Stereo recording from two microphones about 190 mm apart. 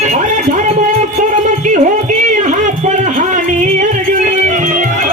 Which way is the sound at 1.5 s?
40° right (ahead or behind).